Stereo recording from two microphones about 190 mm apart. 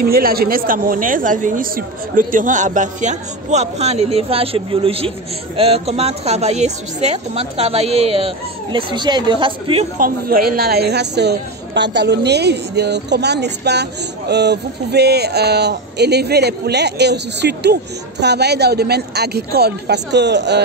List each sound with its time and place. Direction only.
0.0 s a woman's voice: 55° right (ahead or behind); by 9.8 s 25° right (ahead or behind)
9.9 s a woman's voice: 50° right (ahead or behind); by 20.6 s 65° right (ahead or behind)